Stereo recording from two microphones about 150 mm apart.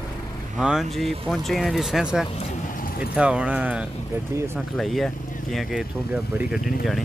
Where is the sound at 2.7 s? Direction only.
65° left (ahead or behind).